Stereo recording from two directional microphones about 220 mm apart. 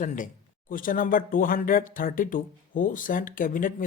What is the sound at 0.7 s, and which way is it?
Speech, 40° left (ahead or behind).